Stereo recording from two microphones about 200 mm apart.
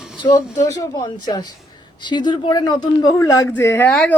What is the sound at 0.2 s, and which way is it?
A woman's voice, 20° left (ahead or behind).